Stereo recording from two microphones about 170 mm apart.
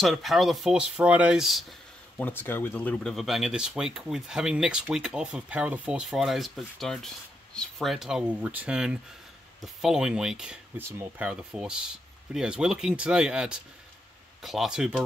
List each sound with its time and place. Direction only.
0.0 s speech: centre (ahead or behind)